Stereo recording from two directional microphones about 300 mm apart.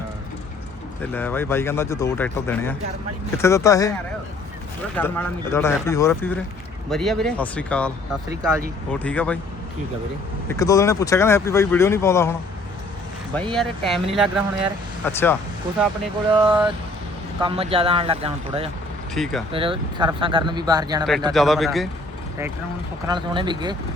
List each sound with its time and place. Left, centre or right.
1.1 s speech: centre
4.9 s speech: centre
10.5 s speech: centre
16.3 s speech: centre
19.1 s speech: centre
19.5 s speech: centre
21.3 s speech: centre
23.0 s speech: centre